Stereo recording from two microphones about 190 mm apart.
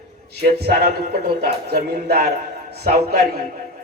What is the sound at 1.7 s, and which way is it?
Speech, 55° right (ahead or behind).